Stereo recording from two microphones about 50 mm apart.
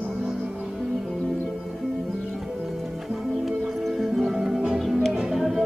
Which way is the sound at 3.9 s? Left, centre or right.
Centre.